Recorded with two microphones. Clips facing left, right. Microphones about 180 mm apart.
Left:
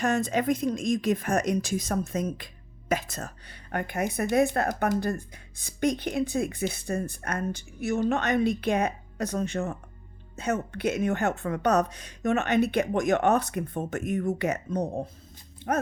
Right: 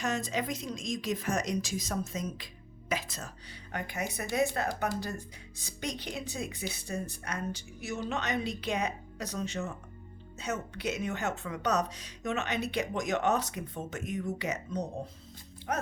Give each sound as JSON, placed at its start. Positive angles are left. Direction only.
{"t": 0.0, "sound": "speech", "side_deg": 55}